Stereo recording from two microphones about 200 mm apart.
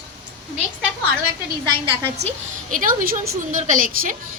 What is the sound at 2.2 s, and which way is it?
A woman's voice, 35° right (ahead or behind).